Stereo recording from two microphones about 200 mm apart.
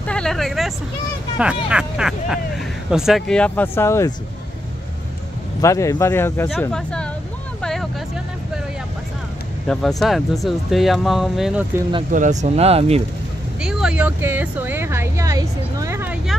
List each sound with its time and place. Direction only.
0.0 s vehicle: 5° left (ahead or behind)
1.4 s speech: 5° right (ahead or behind); by 4.1 s 15° left (ahead or behind)
5.6 s speech: 15° left (ahead or behind)
7.6 s vehicle: centre (ahead or behind)
9.7 s speech: 5° left (ahead or behind)
12.1 s speech: 40° right (ahead or behind)
13.6 s speech: 5° right (ahead or behind)